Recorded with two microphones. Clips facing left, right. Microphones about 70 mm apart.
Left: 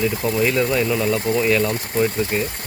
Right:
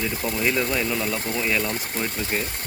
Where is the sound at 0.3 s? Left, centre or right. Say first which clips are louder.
Left 4 dB; centre.